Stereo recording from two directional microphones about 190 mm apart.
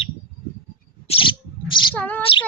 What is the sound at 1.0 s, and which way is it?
Owl, 30° left (ahead or behind).